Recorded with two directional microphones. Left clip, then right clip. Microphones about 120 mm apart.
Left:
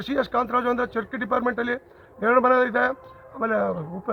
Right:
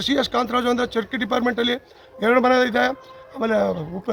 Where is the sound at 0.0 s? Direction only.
10° right (ahead or behind).